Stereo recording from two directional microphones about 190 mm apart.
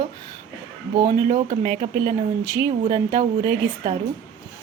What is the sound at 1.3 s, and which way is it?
Speech, 40° right (ahead or behind).